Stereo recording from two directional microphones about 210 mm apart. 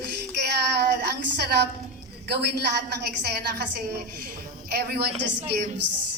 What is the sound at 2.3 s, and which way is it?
Speech, 50° right (ahead or behind).